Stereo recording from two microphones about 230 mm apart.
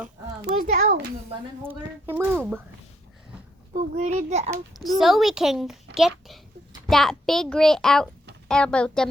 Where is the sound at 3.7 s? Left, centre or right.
Right.